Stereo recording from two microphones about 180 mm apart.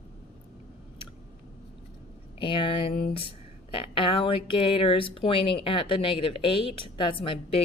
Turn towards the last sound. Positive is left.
turn(degrees=30)  # may be behind; listen again after turning